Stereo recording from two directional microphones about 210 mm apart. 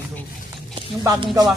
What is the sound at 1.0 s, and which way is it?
Speech, 20° right (ahead or behind).